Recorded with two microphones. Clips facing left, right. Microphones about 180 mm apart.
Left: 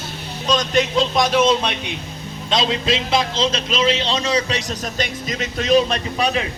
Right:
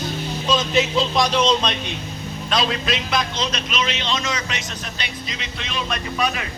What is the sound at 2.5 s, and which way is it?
A man's voice, 25° left (ahead or behind).